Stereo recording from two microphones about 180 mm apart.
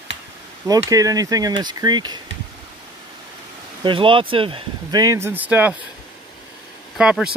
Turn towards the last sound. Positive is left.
turn(degrees=-5)  # may be behind; listen again after turning